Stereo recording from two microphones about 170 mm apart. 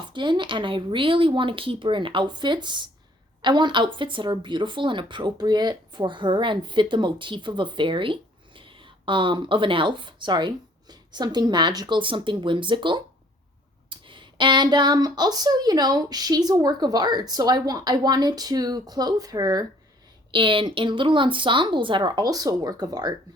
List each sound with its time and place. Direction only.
0.1 s speech: 25° right (ahead or behind)